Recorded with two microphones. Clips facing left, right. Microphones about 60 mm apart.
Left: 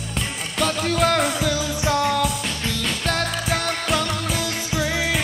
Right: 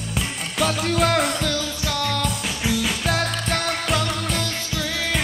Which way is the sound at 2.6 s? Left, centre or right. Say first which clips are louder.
Right 3 dB; centre.